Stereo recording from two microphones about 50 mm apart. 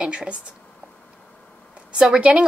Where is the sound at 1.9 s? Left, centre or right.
Centre.